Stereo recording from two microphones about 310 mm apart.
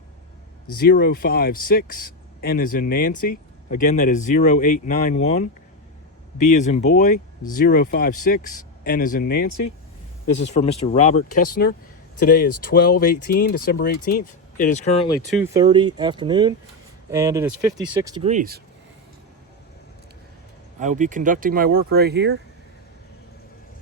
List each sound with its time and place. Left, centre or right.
0.7 s speech: left
15.3 s speech: centre; by 18.6 s right
20.7 s speech: right